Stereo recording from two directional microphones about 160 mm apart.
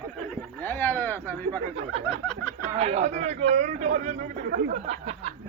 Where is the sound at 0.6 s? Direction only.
15° left (ahead or behind).